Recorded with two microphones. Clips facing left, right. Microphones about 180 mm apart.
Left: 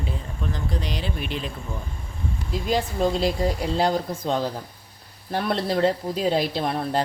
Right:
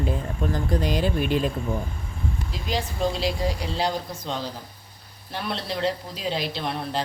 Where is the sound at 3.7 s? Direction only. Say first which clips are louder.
Left 4 dB; 50° left (ahead or behind).